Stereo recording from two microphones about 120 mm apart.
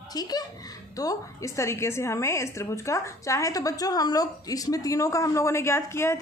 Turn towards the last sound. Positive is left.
turn(degrees=20)  # may be behind; listen again after turning